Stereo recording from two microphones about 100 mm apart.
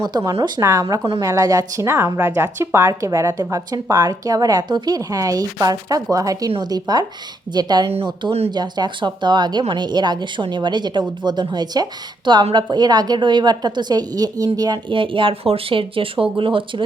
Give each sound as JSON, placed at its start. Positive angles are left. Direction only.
{"t": 0.0, "sound": "a woman's voice", "side_deg": -35}
{"t": 14.8, "sound": "speech", "side_deg": -60}